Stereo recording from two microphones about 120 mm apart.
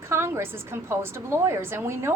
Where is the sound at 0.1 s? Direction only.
20° right (ahead or behind).